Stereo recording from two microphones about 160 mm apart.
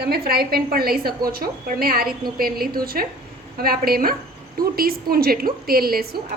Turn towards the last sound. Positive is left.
turn(degrees=-70)  # may be behind; listen again after turning